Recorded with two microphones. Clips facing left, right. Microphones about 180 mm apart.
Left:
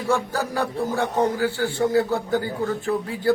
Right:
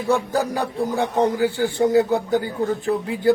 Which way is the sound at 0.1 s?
15° right (ahead or behind).